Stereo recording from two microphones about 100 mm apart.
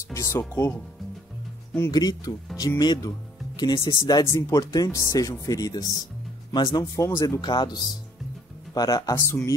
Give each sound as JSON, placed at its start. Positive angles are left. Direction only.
{"t": 0.1, "sound": "speech", "side_deg": 30}
{"t": 1.9, "sound": "speech", "side_deg": 40}
{"t": 7.0, "sound": "speech", "side_deg": 30}
{"t": 7.4, "sound": "speech", "side_deg": 45}
{"t": 9.1, "sound": "speech", "side_deg": 20}